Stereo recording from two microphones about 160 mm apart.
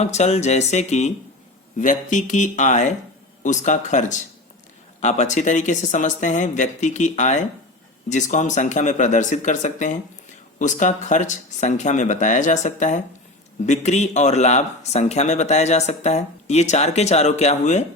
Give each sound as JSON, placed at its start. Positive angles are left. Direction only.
{"t": 0.0, "sound": "speech", "side_deg": 45}